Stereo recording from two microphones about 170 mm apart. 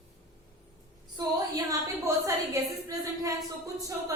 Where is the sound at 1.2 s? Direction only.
20° right (ahead or behind).